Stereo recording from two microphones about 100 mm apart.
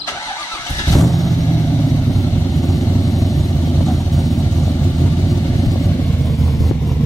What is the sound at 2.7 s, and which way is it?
Vehicle, centre (ahead or behind).